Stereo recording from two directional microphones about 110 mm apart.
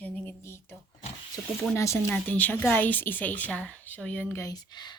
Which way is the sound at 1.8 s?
25° left (ahead or behind).